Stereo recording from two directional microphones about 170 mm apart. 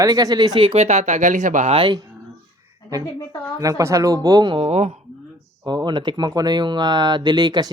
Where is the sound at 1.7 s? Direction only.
25° right (ahead or behind).